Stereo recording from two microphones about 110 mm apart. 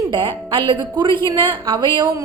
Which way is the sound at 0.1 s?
50° right (ahead or behind).